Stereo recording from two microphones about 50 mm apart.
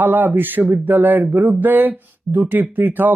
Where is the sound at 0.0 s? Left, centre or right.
Right.